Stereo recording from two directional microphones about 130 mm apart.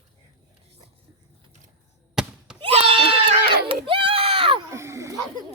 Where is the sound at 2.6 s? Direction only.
45° right (ahead or behind).